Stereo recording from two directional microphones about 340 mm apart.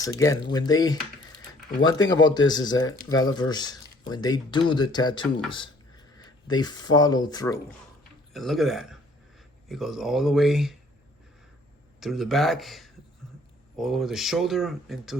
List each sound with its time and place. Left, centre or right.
0.0 s speech: centre
6.1 s a sound: centre
6.9 s speech: centre
8.3 s speech: centre
11.9 s speech: centre